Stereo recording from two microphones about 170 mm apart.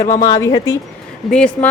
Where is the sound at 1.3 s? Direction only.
5° left (ahead or behind).